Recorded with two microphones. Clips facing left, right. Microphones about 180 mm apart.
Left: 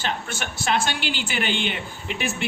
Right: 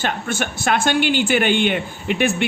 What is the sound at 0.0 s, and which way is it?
A man's voice, 50° right (ahead or behind).